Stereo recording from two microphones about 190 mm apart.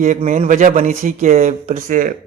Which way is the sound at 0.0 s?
40° right (ahead or behind).